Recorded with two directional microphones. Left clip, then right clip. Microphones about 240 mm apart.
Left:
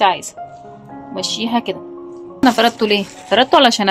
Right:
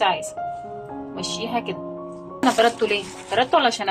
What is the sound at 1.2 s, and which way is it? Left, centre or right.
A woman's voice, left.